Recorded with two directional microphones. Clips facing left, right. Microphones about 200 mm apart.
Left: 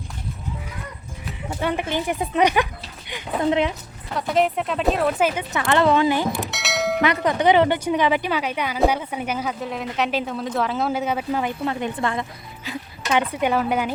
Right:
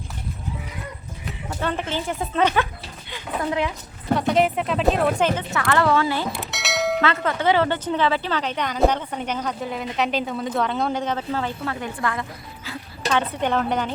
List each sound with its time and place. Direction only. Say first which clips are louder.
1.5 s speech: left 2 dB; 10° left (ahead or behind)
4.1 s speech: right 2 dB; centre (ahead or behind); by 6.2 s 20° left (ahead or behind)
6.5 s a sound: even; centre (ahead or behind)
7.0 s speech: left 3 dB; 15° left (ahead or behind)
13.1 s speech: left 1 dB; 10° left (ahead or behind)